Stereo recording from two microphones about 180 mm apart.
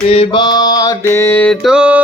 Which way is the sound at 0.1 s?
30° left (ahead or behind).